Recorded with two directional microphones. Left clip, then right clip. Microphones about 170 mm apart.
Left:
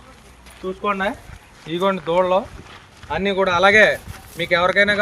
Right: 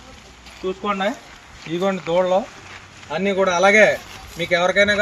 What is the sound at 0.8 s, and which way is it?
Speech, centre (ahead or behind).